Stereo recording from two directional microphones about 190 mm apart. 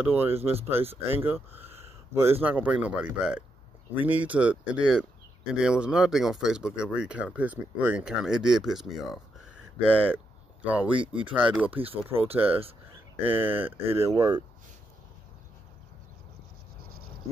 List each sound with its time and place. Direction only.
0.0 s speech: 10° right (ahead or behind)
10.0 s a sound: 10° right (ahead or behind)
11.0 s speech: 25° right (ahead or behind)
11.3 s speech: 5° right (ahead or behind)
11.8 s speech: 30° right (ahead or behind)
13.3 s speech: 10° right (ahead or behind)